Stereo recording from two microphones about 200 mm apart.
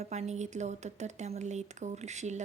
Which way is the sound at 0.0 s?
35° right (ahead or behind).